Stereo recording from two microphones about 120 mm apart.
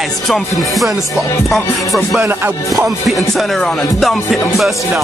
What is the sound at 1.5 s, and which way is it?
Music, centre (ahead or behind).